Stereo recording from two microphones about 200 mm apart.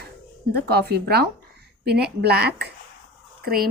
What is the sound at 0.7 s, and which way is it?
Speech, 55° right (ahead or behind).